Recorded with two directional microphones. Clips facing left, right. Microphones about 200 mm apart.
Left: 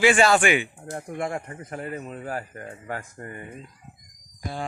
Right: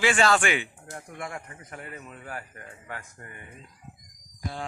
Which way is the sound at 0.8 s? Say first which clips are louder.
Left 8 dB; 35° left (ahead or behind).